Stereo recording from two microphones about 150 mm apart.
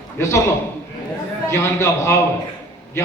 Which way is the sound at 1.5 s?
20° left (ahead or behind).